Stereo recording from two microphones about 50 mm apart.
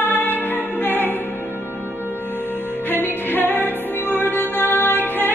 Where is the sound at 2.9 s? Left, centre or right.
Left.